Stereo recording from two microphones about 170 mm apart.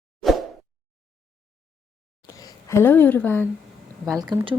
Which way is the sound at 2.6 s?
15° left (ahead or behind).